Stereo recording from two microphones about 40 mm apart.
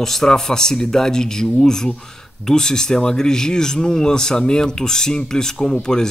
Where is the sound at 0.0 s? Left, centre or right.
Centre.